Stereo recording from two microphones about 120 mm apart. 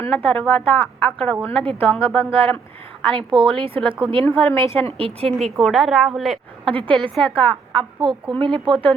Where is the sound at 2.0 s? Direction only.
50° right (ahead or behind).